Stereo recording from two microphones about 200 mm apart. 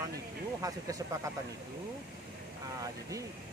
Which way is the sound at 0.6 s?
15° right (ahead or behind).